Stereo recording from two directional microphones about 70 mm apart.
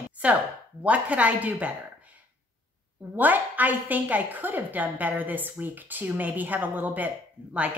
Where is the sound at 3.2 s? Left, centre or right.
Right.